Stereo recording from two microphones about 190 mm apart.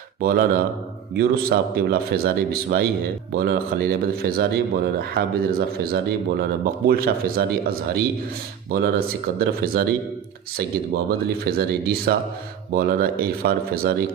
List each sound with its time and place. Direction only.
0.2 s speech: 50° right (ahead or behind)